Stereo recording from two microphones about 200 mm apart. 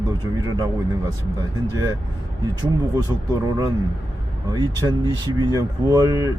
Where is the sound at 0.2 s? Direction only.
20° right (ahead or behind).